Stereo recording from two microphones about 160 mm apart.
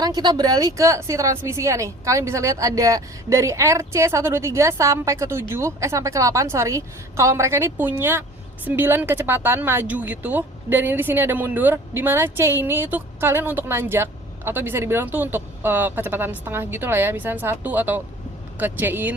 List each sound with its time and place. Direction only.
0.0 s a woman's voice: 25° right (ahead or behind)